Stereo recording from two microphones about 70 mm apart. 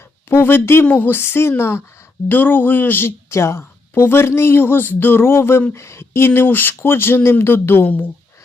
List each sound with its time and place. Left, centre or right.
0.3 s a woman's voice: left
3.2 s a woman's voice: left